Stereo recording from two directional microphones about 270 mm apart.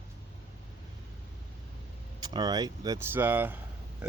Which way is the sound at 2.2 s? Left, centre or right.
Centre.